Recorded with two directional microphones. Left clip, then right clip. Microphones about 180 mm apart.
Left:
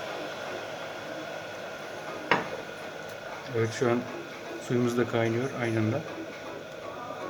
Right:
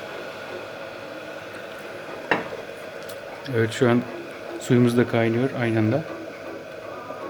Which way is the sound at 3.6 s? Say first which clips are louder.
Right 6 dB; 45° right (ahead or behind).